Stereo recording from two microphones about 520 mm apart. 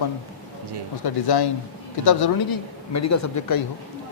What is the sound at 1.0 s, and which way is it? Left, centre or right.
Speech, left.